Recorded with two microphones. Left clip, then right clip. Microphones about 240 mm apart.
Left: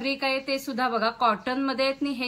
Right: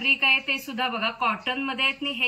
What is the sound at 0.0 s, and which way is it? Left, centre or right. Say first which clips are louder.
A woman's voice: right 6 dB; centre.